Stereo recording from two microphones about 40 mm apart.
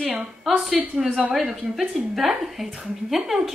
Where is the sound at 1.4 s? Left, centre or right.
Centre.